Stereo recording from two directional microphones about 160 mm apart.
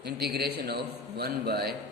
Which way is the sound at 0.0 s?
85° right.